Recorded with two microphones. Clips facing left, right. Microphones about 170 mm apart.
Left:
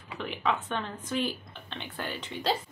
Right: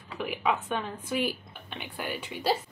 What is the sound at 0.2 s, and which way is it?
Speech, 10° right (ahead or behind).